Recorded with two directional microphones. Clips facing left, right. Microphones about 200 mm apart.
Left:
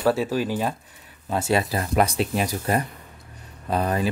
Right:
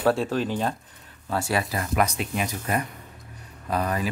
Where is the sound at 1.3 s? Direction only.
25° left (ahead or behind).